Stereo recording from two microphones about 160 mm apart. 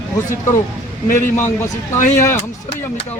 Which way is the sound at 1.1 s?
15° left (ahead or behind).